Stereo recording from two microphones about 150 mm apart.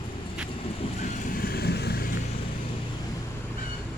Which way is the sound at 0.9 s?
55° left (ahead or behind).